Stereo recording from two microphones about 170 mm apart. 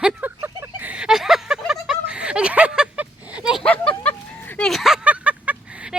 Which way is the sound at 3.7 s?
10° left (ahead or behind).